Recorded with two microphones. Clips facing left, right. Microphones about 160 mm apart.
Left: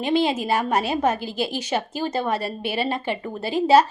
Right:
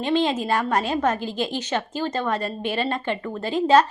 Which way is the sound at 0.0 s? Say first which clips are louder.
Left 1 dB; 10° left (ahead or behind).